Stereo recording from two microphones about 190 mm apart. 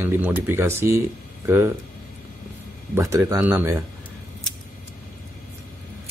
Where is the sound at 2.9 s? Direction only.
15° right (ahead or behind).